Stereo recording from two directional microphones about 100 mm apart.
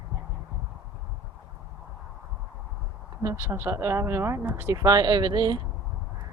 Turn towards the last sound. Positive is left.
turn(degrees=-45)  # may be behind; listen again after turning